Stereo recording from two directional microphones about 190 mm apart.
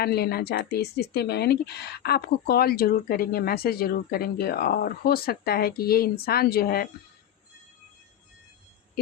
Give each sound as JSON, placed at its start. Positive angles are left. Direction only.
{"t": 0.0, "sound": "speech", "side_deg": 55}